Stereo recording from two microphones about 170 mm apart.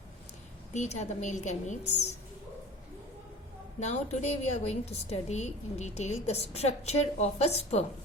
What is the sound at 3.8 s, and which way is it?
A woman's voice, 40° left (ahead or behind).